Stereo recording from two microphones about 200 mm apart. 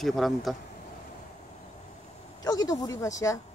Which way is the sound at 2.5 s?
20° left (ahead or behind).